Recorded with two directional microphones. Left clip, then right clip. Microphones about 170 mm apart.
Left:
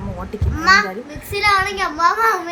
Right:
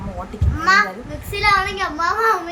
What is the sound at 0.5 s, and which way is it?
A child's voice, 20° left (ahead or behind).